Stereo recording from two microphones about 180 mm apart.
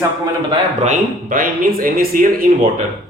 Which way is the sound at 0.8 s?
45° right (ahead or behind).